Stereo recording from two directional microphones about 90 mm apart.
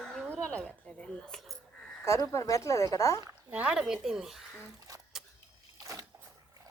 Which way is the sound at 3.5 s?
15° right (ahead or behind).